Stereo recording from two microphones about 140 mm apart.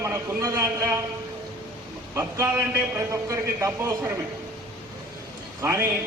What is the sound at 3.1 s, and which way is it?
A man's voice, 20° right (ahead or behind).